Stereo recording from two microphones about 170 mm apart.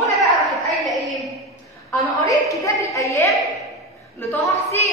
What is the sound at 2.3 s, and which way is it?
A woman's voice, 20° left (ahead or behind).